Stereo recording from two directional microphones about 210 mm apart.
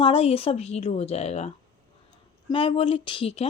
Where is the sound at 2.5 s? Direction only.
25° left (ahead or behind).